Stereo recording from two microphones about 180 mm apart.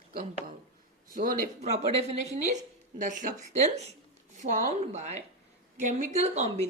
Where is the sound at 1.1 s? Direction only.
45° right (ahead or behind).